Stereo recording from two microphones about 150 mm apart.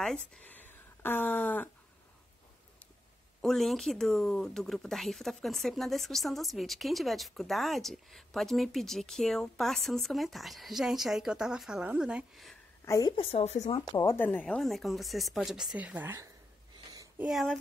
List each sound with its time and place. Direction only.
0.0 s speech: 5° left (ahead or behind)
0.7 s a sound: 15° left (ahead or behind)
3.3 s speech: centre (ahead or behind)
12.8 s a woman's voice: 25° left (ahead or behind)
13.2 s speech: 45° left (ahead or behind)
13.7 s speech: 30° left (ahead or behind)
14.0 s speech: 15° left (ahead or behind)
14.5 s a woman's voice: centre (ahead or behind)
17.2 s speech: centre (ahead or behind)